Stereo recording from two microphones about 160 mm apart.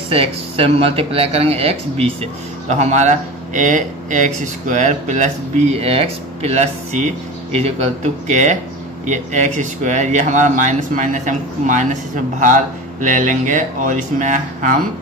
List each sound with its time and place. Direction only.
0.1 s speech: 35° right (ahead or behind); by 14.8 s 55° right (ahead or behind)